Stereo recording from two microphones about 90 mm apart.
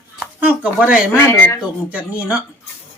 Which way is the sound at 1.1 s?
25° left (ahead or behind).